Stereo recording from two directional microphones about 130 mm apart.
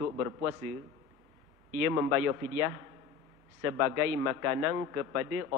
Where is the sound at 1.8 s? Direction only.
20° right (ahead or behind).